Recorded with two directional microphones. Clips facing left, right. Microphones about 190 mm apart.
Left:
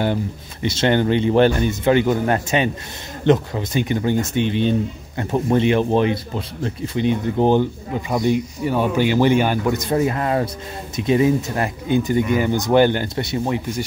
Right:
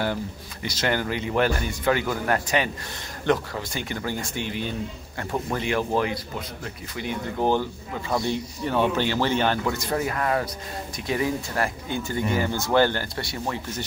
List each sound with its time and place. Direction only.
0.0 s speech: 20° left (ahead or behind)